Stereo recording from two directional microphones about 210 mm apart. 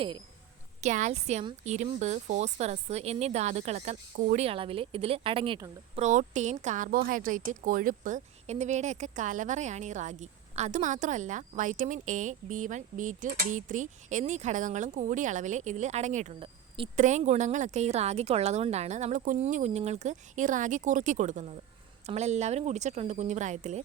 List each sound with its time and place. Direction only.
0.8 s a woman's voice: 35° right (ahead or behind)
6.0 s a woman's voice: 35° right (ahead or behind)